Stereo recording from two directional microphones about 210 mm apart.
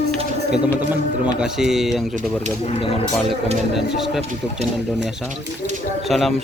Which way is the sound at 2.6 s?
30° left (ahead or behind).